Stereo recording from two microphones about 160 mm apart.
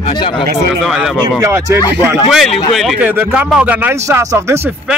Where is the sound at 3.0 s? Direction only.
10° right (ahead or behind).